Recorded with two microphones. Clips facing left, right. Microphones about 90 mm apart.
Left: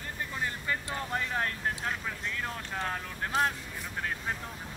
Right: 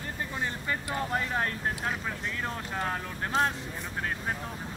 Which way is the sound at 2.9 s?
30° right (ahead or behind).